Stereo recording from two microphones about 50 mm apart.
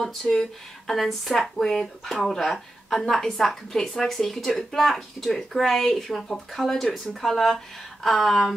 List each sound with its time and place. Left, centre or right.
0.0 s speech: centre